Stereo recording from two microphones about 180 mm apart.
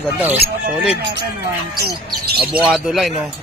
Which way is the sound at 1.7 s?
60° right (ahead or behind).